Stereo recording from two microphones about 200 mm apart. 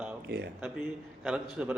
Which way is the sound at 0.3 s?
55° right (ahead or behind).